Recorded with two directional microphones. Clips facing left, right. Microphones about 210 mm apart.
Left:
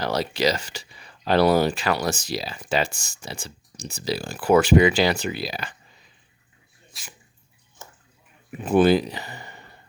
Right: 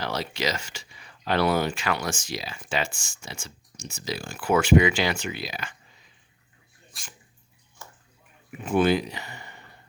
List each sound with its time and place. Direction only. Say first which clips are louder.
0.0 s speech: left 6 dB; 40° left (ahead or behind)
6.9 s speech: left 2 dB; centre (ahead or behind)
7.8 s bathtub: left 1 dB; 20° left (ahead or behind)
8.6 s speech: left 4 dB; 35° left (ahead or behind)